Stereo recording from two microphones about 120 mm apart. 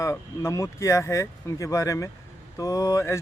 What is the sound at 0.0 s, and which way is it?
Speech, 25° left (ahead or behind).